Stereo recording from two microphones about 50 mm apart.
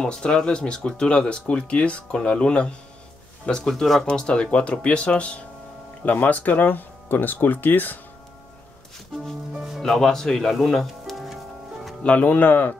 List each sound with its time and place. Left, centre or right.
0.0 s speech: centre
4.1 s speech: centre
6.0 s speech: left
9.8 s speech: centre
12.0 s speech: left